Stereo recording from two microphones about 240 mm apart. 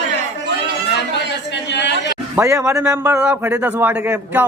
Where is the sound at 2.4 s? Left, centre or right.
Centre.